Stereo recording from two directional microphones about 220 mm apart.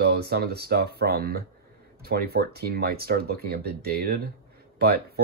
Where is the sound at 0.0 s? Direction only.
45° right (ahead or behind).